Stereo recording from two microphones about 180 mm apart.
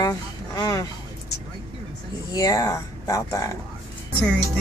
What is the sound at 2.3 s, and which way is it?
Speech, 20° left (ahead or behind).